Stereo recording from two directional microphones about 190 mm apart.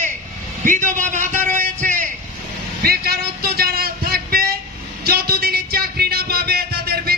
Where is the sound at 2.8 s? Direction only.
55° right (ahead or behind).